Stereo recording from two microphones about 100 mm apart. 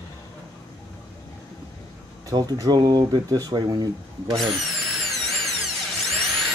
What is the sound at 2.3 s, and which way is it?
Speech, 40° right (ahead or behind).